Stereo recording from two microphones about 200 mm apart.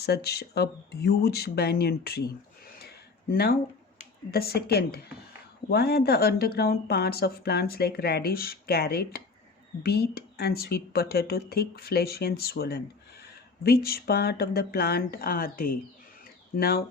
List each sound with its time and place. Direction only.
0.0 s speech: 55° left (ahead or behind)
4.3 s speech: 50° left (ahead or behind)